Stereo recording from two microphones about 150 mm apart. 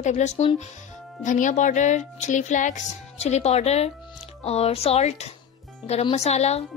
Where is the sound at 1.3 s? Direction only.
55° left (ahead or behind).